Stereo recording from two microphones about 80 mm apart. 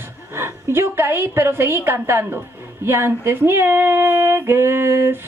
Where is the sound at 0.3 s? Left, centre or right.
Right.